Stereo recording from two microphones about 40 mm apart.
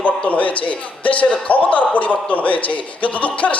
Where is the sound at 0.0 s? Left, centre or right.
Left.